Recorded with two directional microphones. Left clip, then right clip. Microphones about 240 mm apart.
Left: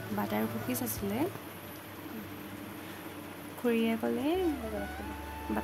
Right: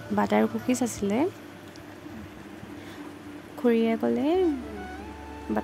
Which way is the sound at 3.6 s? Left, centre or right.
Right.